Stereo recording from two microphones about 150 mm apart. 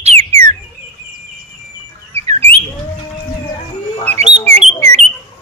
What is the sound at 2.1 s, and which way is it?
Bird, 40° right (ahead or behind).